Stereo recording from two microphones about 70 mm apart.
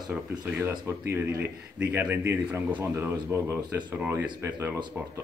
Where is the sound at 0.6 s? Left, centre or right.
Right.